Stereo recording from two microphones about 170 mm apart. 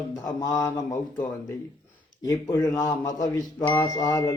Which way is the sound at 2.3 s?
20° left (ahead or behind).